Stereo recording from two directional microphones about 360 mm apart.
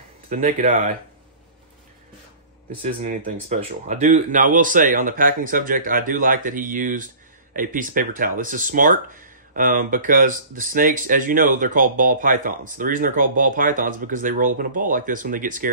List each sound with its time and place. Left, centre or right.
0.3 s speech: right
2.8 s speech: right